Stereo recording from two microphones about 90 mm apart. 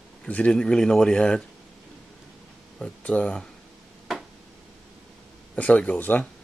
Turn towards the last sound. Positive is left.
turn(degrees=20)  # may be behind; listen again after turning